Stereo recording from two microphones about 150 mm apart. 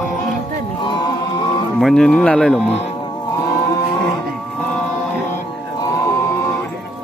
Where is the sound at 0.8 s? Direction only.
30° left (ahead or behind).